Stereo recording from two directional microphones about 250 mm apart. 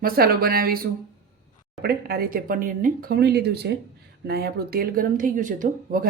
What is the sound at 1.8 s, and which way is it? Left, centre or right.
A woman's voice, right.